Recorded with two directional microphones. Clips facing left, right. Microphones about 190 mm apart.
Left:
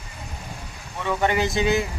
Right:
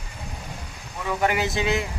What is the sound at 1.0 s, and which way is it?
Speech, 5° right (ahead or behind).